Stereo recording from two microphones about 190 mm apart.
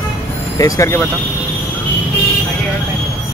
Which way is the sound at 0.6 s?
15° left (ahead or behind).